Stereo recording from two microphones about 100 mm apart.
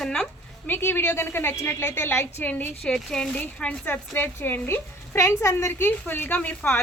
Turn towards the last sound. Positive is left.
turn(degrees=15)  # may be behind; listen again after turning